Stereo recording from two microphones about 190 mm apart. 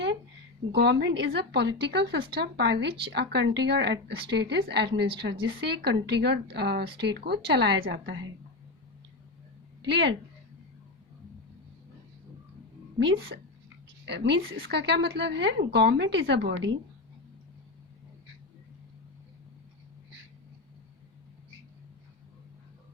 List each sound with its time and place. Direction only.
0.7 s speech: 60° right (ahead or behind)
9.9 s speech: 65° right (ahead or behind)
13.1 s a woman's voice: 55° right (ahead or behind)